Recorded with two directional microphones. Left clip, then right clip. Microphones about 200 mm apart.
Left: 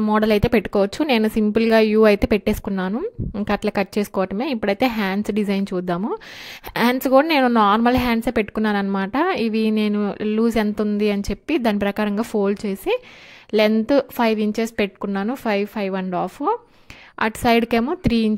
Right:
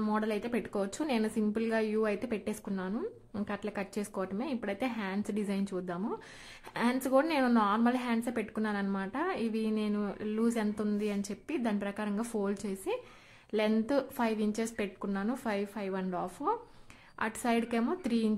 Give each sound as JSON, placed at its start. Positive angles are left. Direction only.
{"t": 0.0, "sound": "a woman's voice", "side_deg": 40}